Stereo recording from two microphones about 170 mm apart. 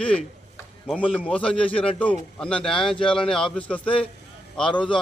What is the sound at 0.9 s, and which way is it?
A man's voice, 10° left (ahead or behind).